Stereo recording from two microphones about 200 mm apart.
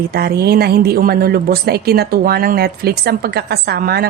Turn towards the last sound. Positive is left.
turn(degrees=-50)  # may be behind; listen again after turning